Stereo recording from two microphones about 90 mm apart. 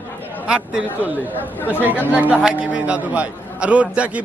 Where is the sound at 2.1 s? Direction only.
15° right (ahead or behind).